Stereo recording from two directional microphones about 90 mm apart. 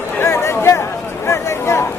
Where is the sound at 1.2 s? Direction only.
30° left (ahead or behind).